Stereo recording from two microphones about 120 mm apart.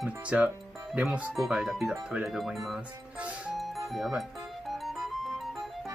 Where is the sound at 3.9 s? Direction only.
Centre (ahead or behind).